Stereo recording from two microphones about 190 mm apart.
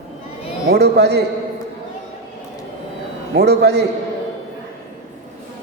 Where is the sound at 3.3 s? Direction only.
60° right (ahead or behind).